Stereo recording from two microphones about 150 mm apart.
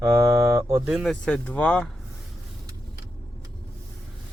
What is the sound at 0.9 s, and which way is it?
Speech, centre (ahead or behind).